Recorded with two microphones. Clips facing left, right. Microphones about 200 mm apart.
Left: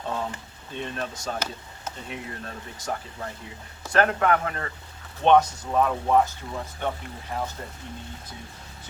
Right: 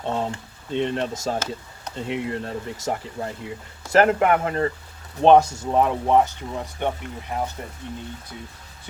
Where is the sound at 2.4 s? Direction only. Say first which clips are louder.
Right 6 dB; 25° right (ahead or behind).